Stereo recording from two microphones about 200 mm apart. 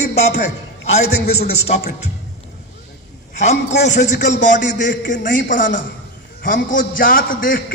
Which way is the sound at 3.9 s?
60° left (ahead or behind).